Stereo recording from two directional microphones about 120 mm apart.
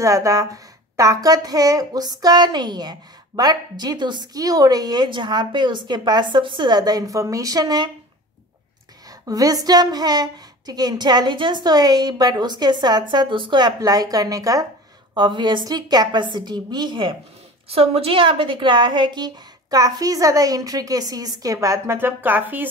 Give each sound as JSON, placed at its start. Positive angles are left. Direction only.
{"t": 0.0, "sound": "a woman's voice", "side_deg": -25}
{"t": 9.3, "sound": "a woman's voice", "side_deg": -30}
{"t": 15.1, "sound": "a woman's voice", "side_deg": -40}
{"t": 17.6, "sound": "a woman's voice", "side_deg": -55}